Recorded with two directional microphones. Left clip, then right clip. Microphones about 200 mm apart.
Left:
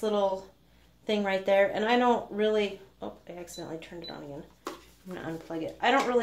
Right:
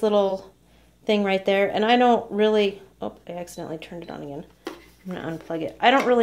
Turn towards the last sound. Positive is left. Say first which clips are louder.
# right 7 dB
turn(degrees=-40)  # may be behind; listen again after turning